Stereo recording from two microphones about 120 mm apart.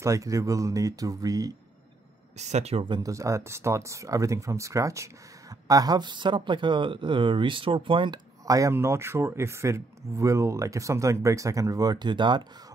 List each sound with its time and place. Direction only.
0.0 s speech: 25° right (ahead or behind)
2.3 s speech: 70° right (ahead or behind)
3.0 s speech: 25° right (ahead or behind); by 8.2 s 45° right (ahead or behind)
8.5 s speech: 25° right (ahead or behind)